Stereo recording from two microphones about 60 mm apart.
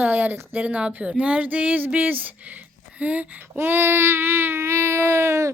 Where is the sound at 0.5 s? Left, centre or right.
Right.